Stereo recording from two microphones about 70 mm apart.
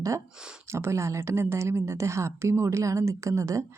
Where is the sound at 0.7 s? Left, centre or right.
Right.